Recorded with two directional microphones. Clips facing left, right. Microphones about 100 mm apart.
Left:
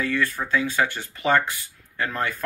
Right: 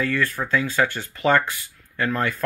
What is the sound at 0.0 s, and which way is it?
Speech, 20° left (ahead or behind).